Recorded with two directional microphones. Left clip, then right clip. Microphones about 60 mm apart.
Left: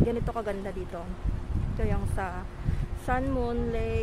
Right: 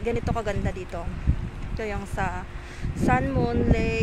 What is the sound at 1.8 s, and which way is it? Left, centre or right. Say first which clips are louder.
Speech: right 4 dB; centre.